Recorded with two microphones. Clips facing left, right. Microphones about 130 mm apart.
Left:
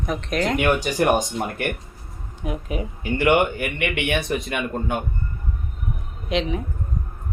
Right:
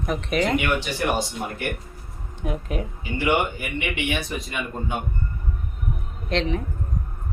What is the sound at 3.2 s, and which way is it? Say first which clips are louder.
Speech: left 4 dB; 65° left (ahead or behind).